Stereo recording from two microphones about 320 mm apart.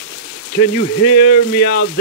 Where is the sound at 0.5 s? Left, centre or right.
Left.